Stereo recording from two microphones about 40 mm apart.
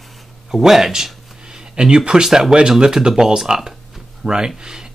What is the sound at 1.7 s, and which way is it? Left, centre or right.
Speech, right.